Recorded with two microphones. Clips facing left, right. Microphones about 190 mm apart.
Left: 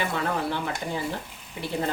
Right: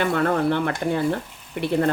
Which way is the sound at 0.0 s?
60° right (ahead or behind).